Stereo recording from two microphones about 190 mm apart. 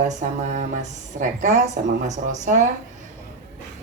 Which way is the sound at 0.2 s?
40° right (ahead or behind).